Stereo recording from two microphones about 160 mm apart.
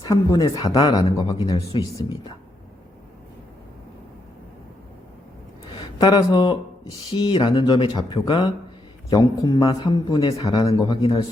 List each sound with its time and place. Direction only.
0.0 s speech: 25° left (ahead or behind)
6.0 s speech: 25° left (ahead or behind)